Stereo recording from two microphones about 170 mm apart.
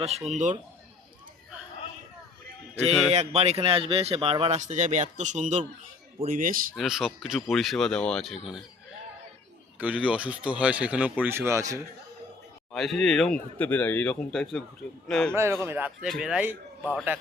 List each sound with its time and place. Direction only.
0.3 s a man's voice: 45° right (ahead or behind)
3.1 s speech: 40° right (ahead or behind)
6.7 s speech: centre (ahead or behind)
9.7 s a man's voice: 10° right (ahead or behind)
12.7 s speech: centre (ahead or behind)
15.3 s a man's voice: 15° right (ahead or behind)